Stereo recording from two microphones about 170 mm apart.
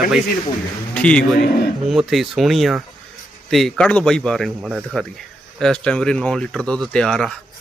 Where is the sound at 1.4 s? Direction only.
65° left (ahead or behind).